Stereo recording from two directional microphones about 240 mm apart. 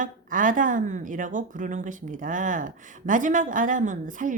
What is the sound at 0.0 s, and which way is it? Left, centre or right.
Speech, right.